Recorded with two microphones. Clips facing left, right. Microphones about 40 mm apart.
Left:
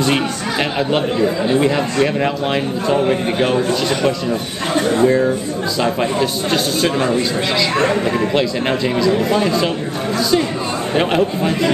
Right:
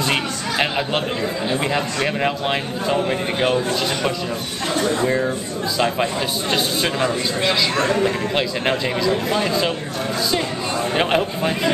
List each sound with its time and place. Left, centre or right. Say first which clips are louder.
0.6 s chatter: left 3 dB; centre
1.6 s a man's voice: left 6 dB; centre
4.3 s speech: left 4 dB; left
5.0 s a man's voice: left 6 dB; centre
7.7 s speech: left 3 dB; left
8.3 s a man's voice: left 3 dB; centre
11.0 s speech: left 4 dB; centre